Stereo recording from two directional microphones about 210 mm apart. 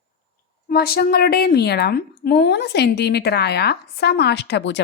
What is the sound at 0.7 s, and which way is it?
A woman's voice, 45° left (ahead or behind).